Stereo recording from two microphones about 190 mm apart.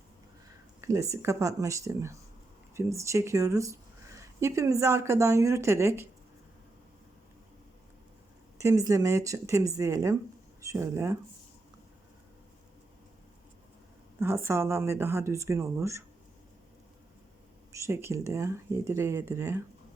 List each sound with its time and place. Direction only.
0.8 s speech: 15° right (ahead or behind)
8.5 s speech: 15° right (ahead or behind)
14.2 s speech: 15° right (ahead or behind)
17.7 s speech: 15° right (ahead or behind)